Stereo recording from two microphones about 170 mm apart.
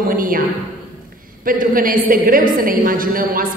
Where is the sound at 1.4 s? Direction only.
55° right (ahead or behind).